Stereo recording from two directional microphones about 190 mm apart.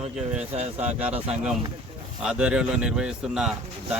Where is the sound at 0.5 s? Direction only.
35° right (ahead or behind).